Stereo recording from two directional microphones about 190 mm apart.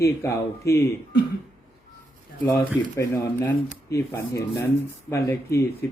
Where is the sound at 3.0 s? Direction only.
15° left (ahead or behind).